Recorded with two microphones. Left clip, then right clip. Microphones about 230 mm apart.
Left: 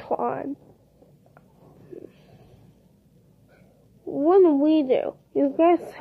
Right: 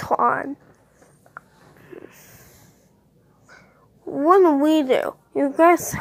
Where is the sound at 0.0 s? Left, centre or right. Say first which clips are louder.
Right 7 dB; centre.